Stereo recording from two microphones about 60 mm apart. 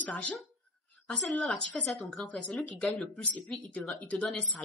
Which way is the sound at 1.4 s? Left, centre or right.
Centre.